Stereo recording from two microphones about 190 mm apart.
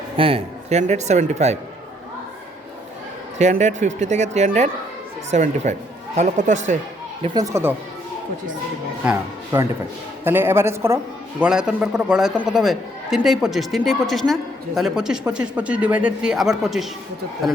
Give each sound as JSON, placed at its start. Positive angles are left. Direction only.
{"t": 0.2, "sound": "speech", "side_deg": -30}
{"t": 3.3, "sound": "speech", "side_deg": -40}
{"t": 7.3, "sound": "speech", "side_deg": -15}
{"t": 9.0, "sound": "a man's voice", "side_deg": -15}